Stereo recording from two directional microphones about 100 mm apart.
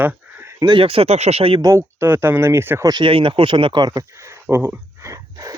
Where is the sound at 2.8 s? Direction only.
45° right (ahead or behind).